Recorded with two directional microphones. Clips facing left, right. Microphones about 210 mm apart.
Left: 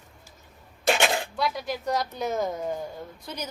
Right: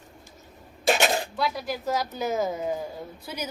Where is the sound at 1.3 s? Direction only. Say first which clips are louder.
Even; centre (ahead or behind).